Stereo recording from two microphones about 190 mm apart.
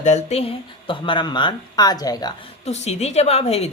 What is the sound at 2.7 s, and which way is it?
Speech, 35° left (ahead or behind).